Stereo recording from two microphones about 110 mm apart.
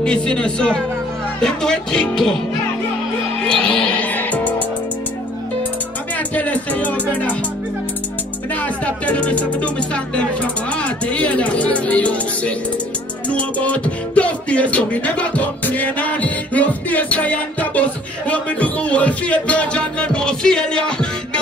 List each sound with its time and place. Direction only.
0.0 s beatboxing: 10° left (ahead or behind)
1.4 s speech: 5° left (ahead or behind)
3.4 s music: 5° left (ahead or behind)
6.1 s music: 15° left (ahead or behind)
8.5 s beatboxing: 10° left (ahead or behind)